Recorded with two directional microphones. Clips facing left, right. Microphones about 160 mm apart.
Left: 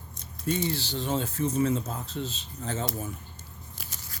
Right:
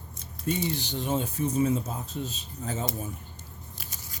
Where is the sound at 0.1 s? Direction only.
10° right (ahead or behind).